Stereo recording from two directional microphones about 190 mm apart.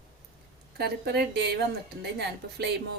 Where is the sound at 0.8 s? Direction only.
60° right (ahead or behind).